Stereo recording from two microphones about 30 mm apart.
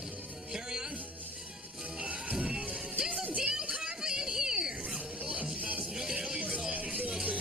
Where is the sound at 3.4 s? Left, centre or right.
Right.